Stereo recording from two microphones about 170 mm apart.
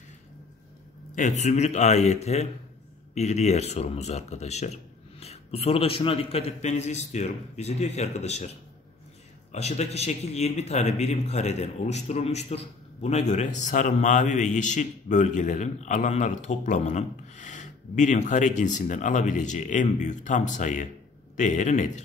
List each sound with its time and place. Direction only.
1.1 s speech: 45° left (ahead or behind)
9.5 s a man's voice: 40° left (ahead or behind)